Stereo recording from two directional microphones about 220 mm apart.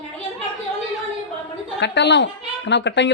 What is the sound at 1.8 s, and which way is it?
Speech, 50° left (ahead or behind).